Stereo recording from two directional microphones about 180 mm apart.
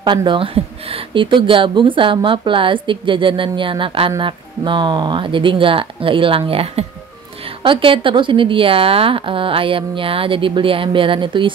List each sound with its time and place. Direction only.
0.0 s speech: 25° right (ahead or behind)